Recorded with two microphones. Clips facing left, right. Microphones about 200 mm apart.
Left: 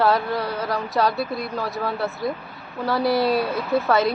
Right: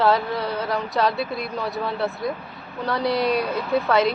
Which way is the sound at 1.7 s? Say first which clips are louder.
Even; centre (ahead or behind).